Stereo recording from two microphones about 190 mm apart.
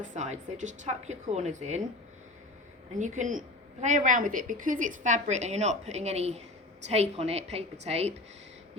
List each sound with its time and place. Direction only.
0.0 s a woman's voice: 40° right (ahead or behind)
3.0 s a woman's voice: 40° right (ahead or behind)